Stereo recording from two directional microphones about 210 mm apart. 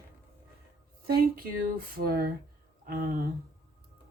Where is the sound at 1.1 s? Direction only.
45° right (ahead or behind).